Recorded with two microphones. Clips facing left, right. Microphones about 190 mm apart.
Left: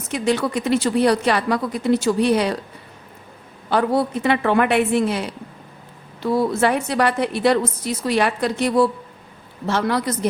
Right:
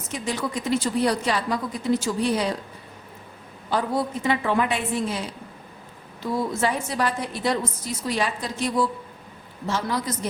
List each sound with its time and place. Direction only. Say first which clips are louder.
0.1 s a woman's voice: left 8 dB; 70° left (ahead or behind)
3.7 s a woman's voice: left 6 dB; 70° left (ahead or behind)